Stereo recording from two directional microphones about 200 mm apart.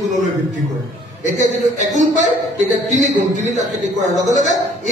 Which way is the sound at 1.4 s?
35° right (ahead or behind).